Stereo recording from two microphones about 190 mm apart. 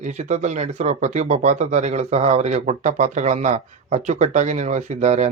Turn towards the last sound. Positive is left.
turn(degrees=-35)  # may be behind; listen again after turning